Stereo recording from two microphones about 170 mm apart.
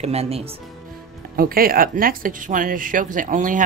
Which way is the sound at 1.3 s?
60° right (ahead or behind).